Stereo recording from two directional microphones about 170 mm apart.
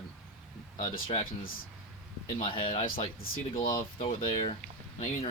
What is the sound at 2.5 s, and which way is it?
Speech, 30° left (ahead or behind).